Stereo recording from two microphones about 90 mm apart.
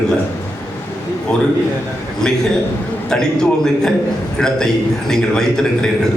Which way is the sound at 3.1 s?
5° left (ahead or behind).